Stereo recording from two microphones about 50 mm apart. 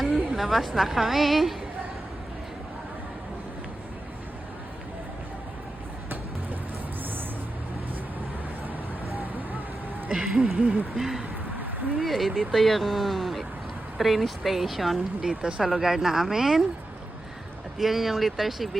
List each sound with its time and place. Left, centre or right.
0.0 s a woman's voice: centre
9.1 s vehicle: right
10.1 s a sound: centre
10.9 s speech: centre
15.4 s a sound: centre
15.6 s speech: centre
17.7 s speech: centre